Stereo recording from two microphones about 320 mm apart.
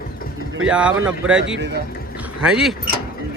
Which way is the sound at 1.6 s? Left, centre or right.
Right.